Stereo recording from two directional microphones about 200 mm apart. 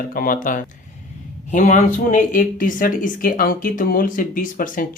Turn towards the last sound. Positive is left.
turn(degrees=45)  # may be behind; listen again after turning